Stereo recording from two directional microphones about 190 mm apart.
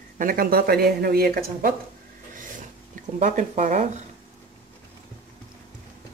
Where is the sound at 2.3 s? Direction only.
45° right (ahead or behind).